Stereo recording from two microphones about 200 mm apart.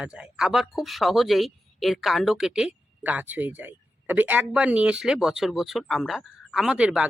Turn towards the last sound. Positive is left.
turn(degrees=-5)  # may be behind; listen again after turning